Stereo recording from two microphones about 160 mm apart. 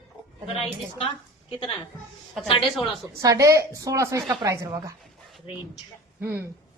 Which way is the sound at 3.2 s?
20° right (ahead or behind).